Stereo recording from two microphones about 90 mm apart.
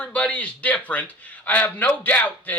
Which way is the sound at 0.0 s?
15° left (ahead or behind).